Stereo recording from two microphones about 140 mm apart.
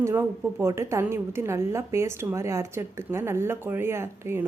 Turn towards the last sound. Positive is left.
turn(degrees=-20)  # may be behind; listen again after turning